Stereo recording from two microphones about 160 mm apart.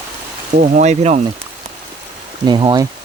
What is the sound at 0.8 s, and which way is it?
Speech, 45° right (ahead or behind).